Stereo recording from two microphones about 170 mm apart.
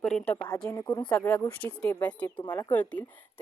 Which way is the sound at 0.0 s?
5° left (ahead or behind).